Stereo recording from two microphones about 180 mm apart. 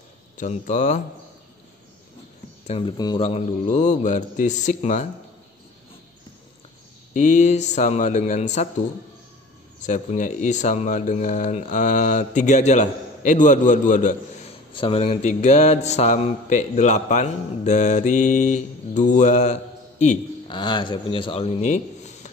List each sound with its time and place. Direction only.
0.4 s mantra: 45° left (ahead or behind)
2.6 s speech: 35° left (ahead or behind)
3.2 s mantra: 35° left (ahead or behind)
7.2 s mantra: 40° left (ahead or behind)
9.8 s speech: 45° left (ahead or behind)
14.7 s mantra: 30° left (ahead or behind)
20.4 s a man's voice: 25° left (ahead or behind)